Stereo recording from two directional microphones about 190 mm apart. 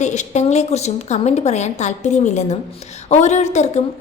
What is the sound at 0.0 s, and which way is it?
A woman's voice, 40° left (ahead or behind).